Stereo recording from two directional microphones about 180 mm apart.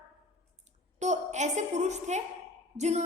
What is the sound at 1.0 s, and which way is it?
A woman's voice, 40° right (ahead or behind).